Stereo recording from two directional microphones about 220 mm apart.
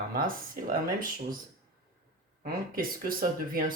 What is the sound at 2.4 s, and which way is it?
Speech, 40° right (ahead or behind).